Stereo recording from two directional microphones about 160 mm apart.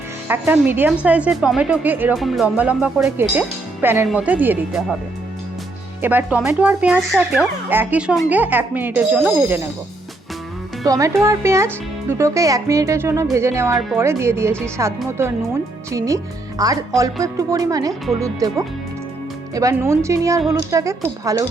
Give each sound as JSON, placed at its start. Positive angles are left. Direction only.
{"t": 0.3, "sound": "speech", "side_deg": -10}
{"t": 2.1, "sound": "speech", "side_deg": 0}
{"t": 6.0, "sound": "speech", "side_deg": -10}
{"t": 10.8, "sound": "speech", "side_deg": -20}